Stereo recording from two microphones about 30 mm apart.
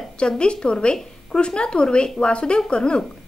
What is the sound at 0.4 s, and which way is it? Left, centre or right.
Speech, left.